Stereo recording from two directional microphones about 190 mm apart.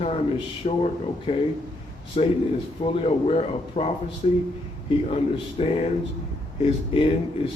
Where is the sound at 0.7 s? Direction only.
35° left (ahead or behind).